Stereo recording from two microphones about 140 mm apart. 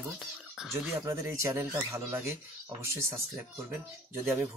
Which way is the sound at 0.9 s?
20° right (ahead or behind).